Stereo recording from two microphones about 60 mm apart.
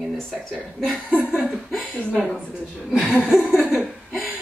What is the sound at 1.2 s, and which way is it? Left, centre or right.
Speech, centre.